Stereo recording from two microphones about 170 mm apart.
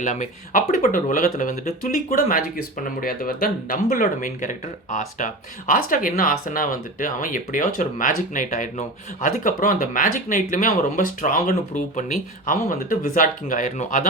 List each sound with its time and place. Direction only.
0.0 s speech: 45° left (ahead or behind)